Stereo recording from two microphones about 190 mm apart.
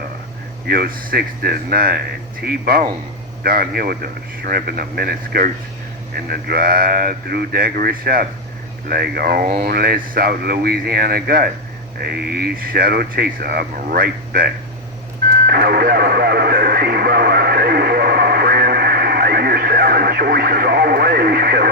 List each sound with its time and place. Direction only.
0.7 s speech: 55° right (ahead or behind)
15.3 s radio: 60° right (ahead or behind)